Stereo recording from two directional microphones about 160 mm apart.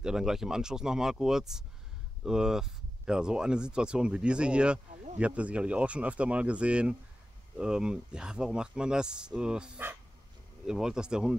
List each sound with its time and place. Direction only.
0.0 s speech: 5° right (ahead or behind)